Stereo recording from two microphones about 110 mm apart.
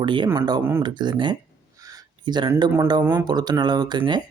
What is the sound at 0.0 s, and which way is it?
Speech, 45° right (ahead or behind).